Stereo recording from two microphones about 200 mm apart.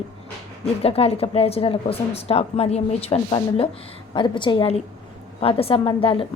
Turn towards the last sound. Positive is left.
turn(degrees=25)  # may be behind; listen again after turning